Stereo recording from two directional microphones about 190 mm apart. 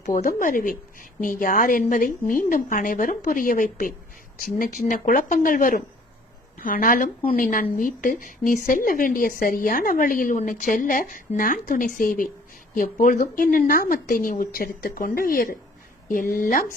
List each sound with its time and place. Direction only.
0.0 s a woman's voice: 45° left (ahead or behind)